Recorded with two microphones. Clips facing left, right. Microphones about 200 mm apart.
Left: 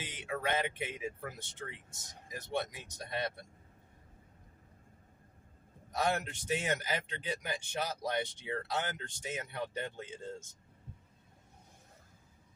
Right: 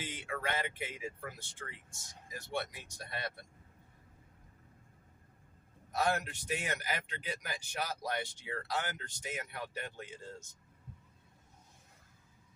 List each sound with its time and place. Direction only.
0.0 s speech: 20° left (ahead or behind)
6.1 s speech: 25° left (ahead or behind)